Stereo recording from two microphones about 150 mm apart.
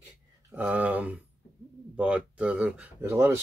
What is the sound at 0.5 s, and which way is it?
Speech, 10° right (ahead or behind).